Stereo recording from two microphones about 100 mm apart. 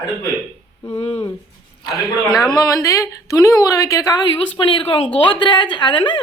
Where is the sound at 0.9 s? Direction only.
90° left.